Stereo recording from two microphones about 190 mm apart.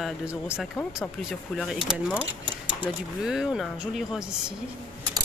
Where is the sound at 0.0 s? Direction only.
5° right (ahead or behind).